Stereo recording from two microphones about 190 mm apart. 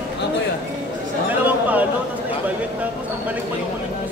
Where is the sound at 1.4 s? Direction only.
10° right (ahead or behind).